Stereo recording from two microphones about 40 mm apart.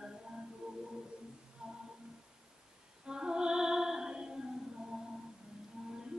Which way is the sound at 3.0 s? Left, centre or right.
Right.